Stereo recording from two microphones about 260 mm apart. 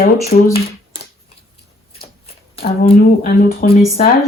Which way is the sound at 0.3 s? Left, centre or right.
Left.